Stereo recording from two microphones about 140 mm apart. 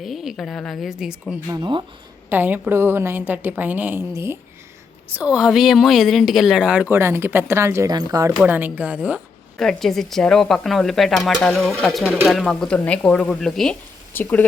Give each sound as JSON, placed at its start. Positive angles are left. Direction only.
{"t": 0.0, "sound": "speech", "side_deg": 0}
{"t": 2.3, "sound": "a woman's voice", "side_deg": -15}
{"t": 8.4, "sound": "a woman's voice", "side_deg": -10}
{"t": 9.6, "sound": "speech", "side_deg": 0}
{"t": 14.1, "sound": "speech", "side_deg": 15}